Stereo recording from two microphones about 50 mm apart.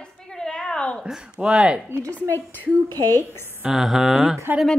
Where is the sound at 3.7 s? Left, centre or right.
Centre.